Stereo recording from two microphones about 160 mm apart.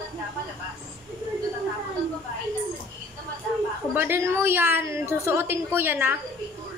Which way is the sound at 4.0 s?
15° right (ahead or behind).